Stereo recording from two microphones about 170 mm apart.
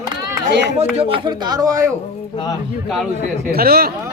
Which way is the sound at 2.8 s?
Centre (ahead or behind).